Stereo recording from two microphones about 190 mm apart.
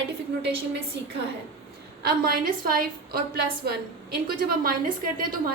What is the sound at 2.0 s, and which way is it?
A woman's voice, 55° right (ahead or behind).